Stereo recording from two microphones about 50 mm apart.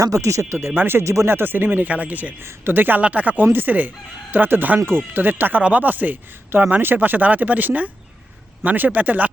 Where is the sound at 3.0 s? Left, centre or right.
Right.